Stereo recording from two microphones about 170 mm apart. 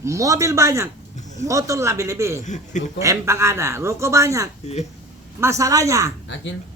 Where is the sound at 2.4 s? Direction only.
45° left (ahead or behind).